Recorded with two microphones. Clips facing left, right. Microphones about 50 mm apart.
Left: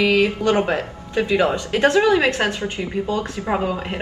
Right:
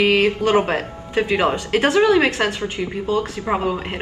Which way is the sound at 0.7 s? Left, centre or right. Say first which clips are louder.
Right 1 dB; right.